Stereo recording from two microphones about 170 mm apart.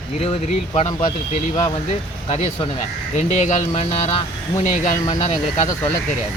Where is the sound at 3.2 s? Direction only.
40° left (ahead or behind).